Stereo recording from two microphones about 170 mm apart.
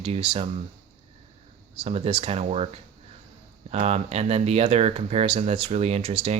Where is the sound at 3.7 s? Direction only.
40° right (ahead or behind).